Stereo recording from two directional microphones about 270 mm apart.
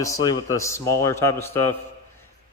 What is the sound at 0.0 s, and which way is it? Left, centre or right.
A man's voice, centre.